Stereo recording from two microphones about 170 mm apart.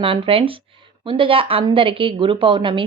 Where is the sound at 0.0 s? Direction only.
30° right (ahead or behind).